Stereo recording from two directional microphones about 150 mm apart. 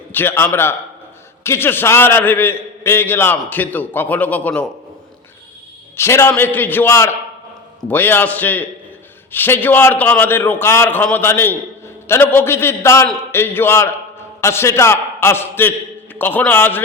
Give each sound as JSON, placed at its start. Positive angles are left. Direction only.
{"t": 0.1, "sound": "a man's voice", "side_deg": 15}
{"t": 6.0, "sound": "a man's voice", "side_deg": 15}